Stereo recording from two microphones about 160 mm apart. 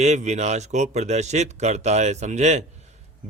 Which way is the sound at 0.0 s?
45° right (ahead or behind).